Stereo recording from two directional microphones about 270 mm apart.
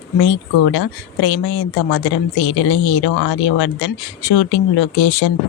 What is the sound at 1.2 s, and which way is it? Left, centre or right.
A woman's voice, left.